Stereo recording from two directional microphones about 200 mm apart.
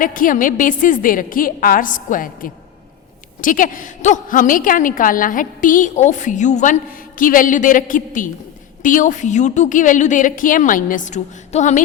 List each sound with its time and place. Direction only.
0.0 s a woman's voice: 45° left (ahead or behind)